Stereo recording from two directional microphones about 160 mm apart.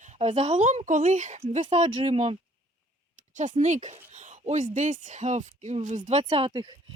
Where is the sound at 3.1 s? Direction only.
50° right (ahead or behind).